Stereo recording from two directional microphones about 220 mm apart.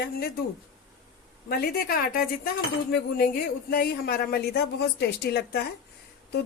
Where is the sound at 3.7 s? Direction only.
40° left (ahead or behind).